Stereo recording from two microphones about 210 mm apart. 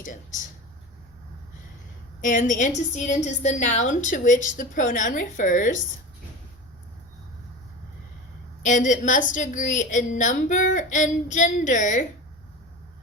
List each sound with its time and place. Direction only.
0.0 s speech: 40° left (ahead or behind)
2.2 s a woman's voice: 40° left (ahead or behind)
8.6 s a woman's voice: 35° left (ahead or behind)